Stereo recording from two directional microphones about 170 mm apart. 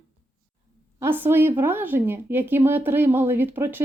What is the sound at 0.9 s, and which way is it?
Speech, 15° right (ahead or behind).